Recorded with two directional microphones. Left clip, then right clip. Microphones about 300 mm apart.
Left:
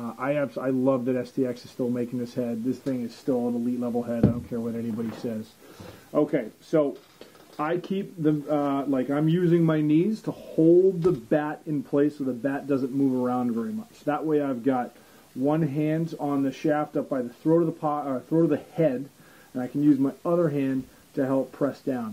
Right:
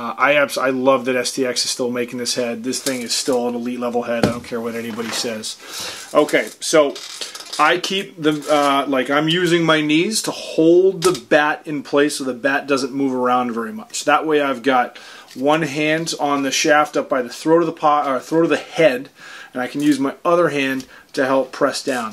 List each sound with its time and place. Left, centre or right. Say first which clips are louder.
0.0 s speech: right 12 dB; centre
3.3 s speech: right 5 dB; centre
10.2 s speech: right 6 dB; right
11.0 s speech: right 9 dB; centre